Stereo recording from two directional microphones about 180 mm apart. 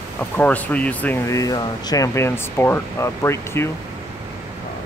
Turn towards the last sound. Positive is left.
turn(degrees=15)  # may be behind; listen again after turning